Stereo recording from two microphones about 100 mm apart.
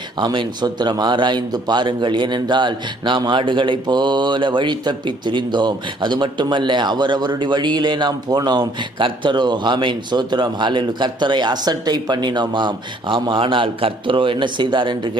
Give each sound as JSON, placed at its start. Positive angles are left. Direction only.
{"t": 0.2, "sound": "a man's voice", "side_deg": -50}